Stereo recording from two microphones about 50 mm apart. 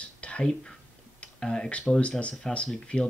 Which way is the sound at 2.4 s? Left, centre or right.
Centre.